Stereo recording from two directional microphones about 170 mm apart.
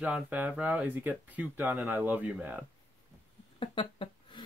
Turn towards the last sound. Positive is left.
turn(degrees=30)  # may be behind; listen again after turning